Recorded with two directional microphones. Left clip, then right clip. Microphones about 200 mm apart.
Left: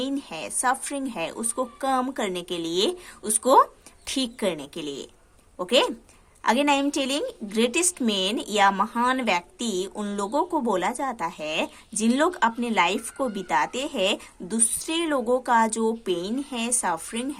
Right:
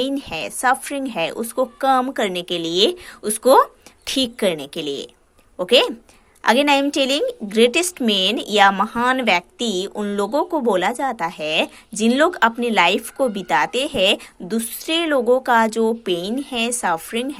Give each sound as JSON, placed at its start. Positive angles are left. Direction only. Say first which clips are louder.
{"t": 0.0, "sound": "a woman's voice", "louder": "right 7 dB", "side_deg": -20}